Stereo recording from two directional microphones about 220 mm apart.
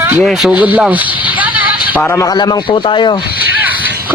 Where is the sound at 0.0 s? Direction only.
5° right (ahead or behind).